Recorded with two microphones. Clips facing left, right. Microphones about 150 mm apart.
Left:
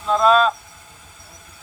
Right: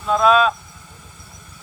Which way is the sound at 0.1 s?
5° right (ahead or behind).